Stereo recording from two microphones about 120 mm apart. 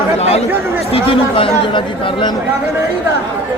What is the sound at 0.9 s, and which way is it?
Speech, 50° left (ahead or behind).